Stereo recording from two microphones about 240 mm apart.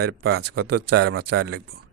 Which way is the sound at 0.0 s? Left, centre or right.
Right.